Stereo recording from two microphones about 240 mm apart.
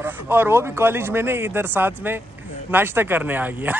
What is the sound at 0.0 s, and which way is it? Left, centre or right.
Speech, centre.